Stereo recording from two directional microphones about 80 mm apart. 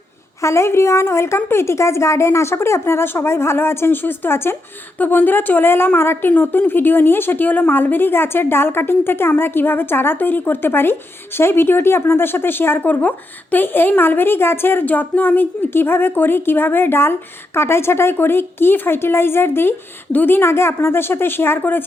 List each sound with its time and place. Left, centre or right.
0.4 s speech: left